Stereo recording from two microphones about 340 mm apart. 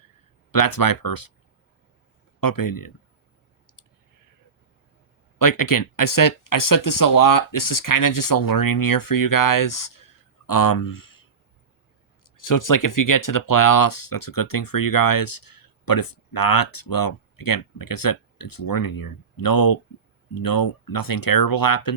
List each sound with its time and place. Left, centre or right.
0.5 s speech: left
2.4 s speech: left
5.4 s speech: left
12.2 s speech: left